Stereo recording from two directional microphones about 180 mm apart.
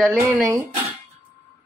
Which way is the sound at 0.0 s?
Centre (ahead or behind).